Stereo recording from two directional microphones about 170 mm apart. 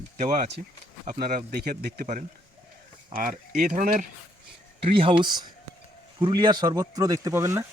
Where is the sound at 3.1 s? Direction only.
55° right (ahead or behind).